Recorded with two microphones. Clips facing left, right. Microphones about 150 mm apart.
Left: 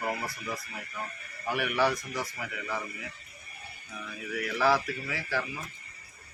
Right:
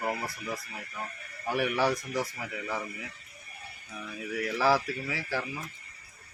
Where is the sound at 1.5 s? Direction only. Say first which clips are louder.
Right 1 dB; 35° right (ahead or behind).